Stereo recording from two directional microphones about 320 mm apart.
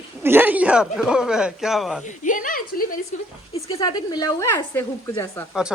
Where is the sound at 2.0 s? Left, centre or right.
Left.